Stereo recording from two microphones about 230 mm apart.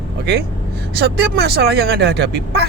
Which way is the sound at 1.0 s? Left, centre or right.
Right.